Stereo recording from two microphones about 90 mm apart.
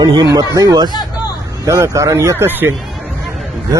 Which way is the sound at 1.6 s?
35° right (ahead or behind).